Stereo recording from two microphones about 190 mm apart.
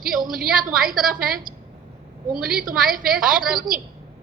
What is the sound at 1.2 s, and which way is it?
Speech, 50° right (ahead or behind).